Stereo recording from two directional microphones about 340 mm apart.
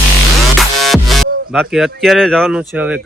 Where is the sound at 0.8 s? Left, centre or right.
Centre.